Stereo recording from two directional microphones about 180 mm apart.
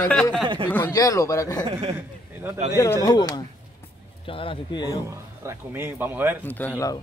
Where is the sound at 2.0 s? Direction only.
10° right (ahead or behind).